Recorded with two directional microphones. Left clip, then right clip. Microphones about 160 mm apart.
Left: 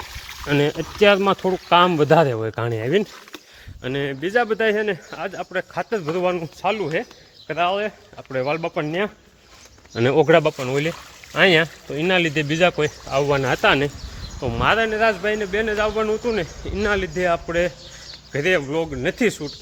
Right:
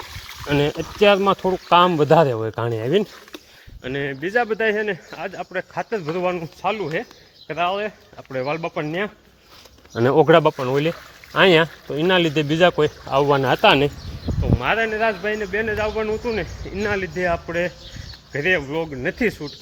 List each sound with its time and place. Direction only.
0.4 s speech: 10° left (ahead or behind)
3.8 s speech: 35° left (ahead or behind)
9.9 s speech: 5° left (ahead or behind); by 13.9 s 15° right (ahead or behind)
14.6 s speech: 40° left (ahead or behind)
14.8 s speech: 25° left (ahead or behind)